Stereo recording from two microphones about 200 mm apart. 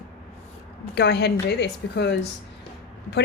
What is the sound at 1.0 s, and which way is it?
Speech, 55° left (ahead or behind).